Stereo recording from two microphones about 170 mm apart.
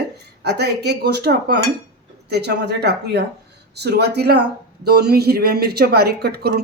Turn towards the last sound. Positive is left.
turn(degrees=-70)  # may be behind; listen again after turning